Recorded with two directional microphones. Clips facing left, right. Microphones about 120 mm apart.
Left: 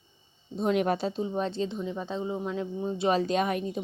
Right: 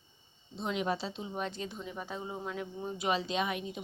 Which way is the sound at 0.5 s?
50° left (ahead or behind).